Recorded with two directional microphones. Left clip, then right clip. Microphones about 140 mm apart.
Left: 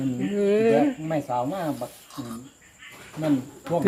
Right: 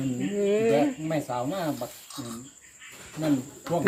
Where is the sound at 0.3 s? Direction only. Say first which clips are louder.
Left 3 dB; 20° left (ahead or behind).